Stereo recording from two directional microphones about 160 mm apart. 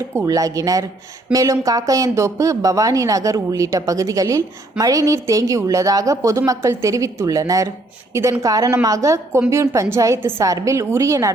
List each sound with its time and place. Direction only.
0.2 s a woman's voice: 20° right (ahead or behind)